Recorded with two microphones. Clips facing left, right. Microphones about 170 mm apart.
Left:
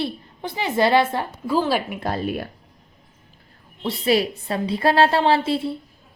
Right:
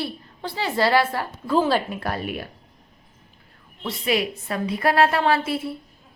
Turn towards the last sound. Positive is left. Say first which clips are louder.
# left 3 dB
turn(degrees=25)  # may be behind; listen again after turning